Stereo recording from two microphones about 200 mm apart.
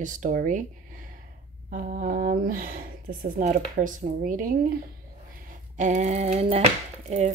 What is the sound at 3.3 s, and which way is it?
Speech, 40° right (ahead or behind).